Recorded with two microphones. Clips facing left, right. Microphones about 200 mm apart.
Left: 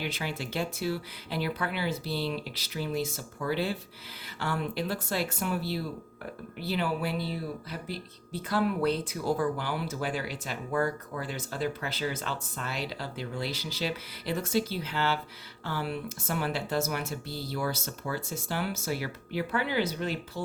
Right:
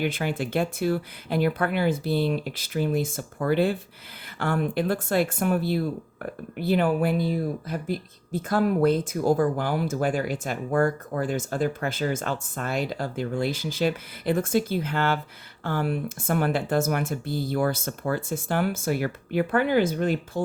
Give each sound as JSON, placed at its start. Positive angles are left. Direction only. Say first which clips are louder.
{"t": 0.0, "sound": "speech", "louder": "right 8 dB", "side_deg": -50}